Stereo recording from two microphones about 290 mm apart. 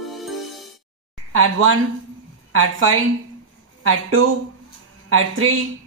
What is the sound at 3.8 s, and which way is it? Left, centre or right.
A woman's voice, right.